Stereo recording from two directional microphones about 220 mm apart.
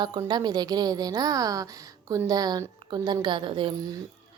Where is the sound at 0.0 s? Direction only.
20° right (ahead or behind).